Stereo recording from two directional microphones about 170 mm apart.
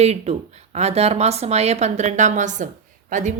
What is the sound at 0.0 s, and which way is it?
A woman's voice, 40° right (ahead or behind).